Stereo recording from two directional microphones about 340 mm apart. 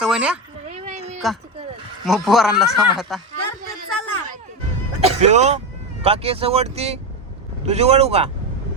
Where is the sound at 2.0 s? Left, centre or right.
Centre.